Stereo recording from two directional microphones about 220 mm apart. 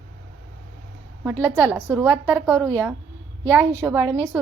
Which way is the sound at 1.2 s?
10° right (ahead or behind).